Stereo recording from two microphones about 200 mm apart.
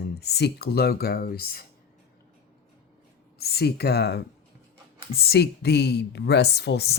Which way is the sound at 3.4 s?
55° left (ahead or behind).